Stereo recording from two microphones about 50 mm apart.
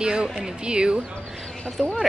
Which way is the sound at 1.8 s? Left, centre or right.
Centre.